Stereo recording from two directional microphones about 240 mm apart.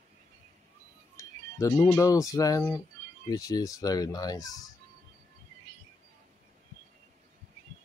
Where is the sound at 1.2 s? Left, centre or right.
Centre.